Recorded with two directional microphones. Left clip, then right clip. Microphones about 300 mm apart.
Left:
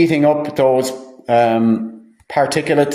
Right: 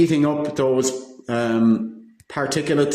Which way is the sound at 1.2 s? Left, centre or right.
Centre.